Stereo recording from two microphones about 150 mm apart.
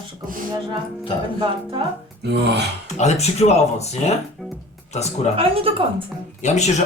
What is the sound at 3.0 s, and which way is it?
Speech, 45° left (ahead or behind).